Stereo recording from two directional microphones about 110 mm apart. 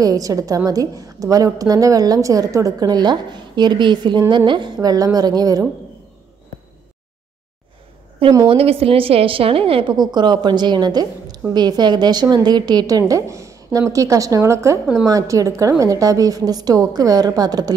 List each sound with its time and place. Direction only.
0.0 s a woman's voice: 35° right (ahead or behind)
8.5 s a woman's voice: 60° right (ahead or behind)
9.9 s a woman's voice: 40° right (ahead or behind)